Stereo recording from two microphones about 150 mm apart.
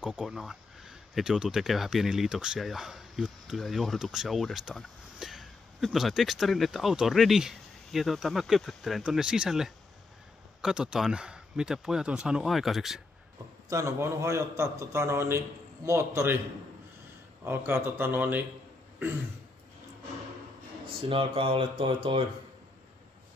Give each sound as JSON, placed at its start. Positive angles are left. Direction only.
{"t": 0.0, "sound": "speech", "side_deg": -5}
{"t": 13.7, "sound": "a man's voice", "side_deg": -20}
{"t": 17.5, "sound": "speech", "side_deg": -15}
{"t": 21.1, "sound": "speech", "side_deg": -35}